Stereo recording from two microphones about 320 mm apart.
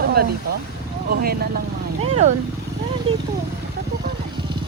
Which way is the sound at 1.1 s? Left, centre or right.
Right.